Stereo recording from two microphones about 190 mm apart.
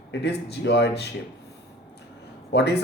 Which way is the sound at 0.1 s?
65° left (ahead or behind).